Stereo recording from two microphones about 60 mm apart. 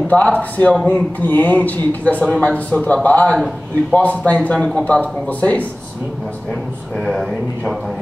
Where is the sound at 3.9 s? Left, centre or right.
Centre.